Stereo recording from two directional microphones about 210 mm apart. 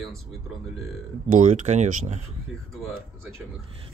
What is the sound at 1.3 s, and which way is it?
Speech, 35° right (ahead or behind).